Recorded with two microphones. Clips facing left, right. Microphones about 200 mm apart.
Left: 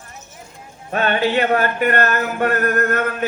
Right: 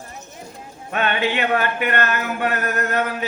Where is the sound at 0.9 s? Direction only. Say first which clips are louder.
Left 4 dB; 35° left (ahead or behind).